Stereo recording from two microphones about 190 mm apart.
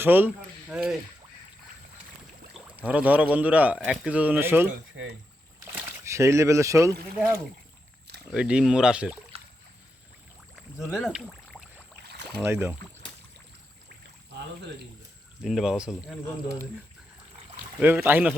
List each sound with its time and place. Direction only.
0.0 s speech: 10° right (ahead or behind)
2.5 s speech: 5° right (ahead or behind)
5.7 s speech: 15° right (ahead or behind)
8.3 s speech: 5° right (ahead or behind)
9.3 s a sound: 30° right (ahead or behind)
10.8 s speech: 5° right (ahead or behind)
12.5 s speech: 15° right (ahead or behind)
15.4 s speech: centre (ahead or behind)
17.7 s speech: 10° right (ahead or behind)